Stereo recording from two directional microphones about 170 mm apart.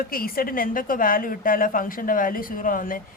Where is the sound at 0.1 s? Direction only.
60° left (ahead or behind).